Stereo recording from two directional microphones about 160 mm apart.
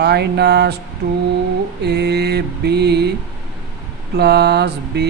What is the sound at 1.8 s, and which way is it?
Speech, 90° right.